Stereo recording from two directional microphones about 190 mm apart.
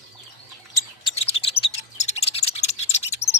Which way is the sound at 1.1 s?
30° left (ahead or behind).